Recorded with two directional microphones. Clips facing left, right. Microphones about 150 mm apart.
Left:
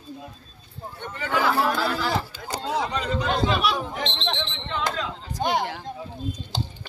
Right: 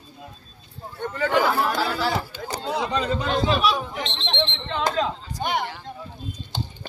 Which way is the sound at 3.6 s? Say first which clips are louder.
Right 2 dB; 50° left (ahead or behind).